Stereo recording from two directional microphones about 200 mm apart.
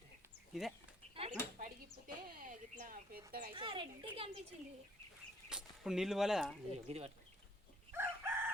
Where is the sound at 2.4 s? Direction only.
40° right (ahead or behind).